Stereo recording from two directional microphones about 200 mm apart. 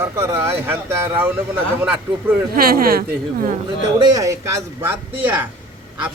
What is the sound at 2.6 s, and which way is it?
A woman's voice, 50° right (ahead or behind).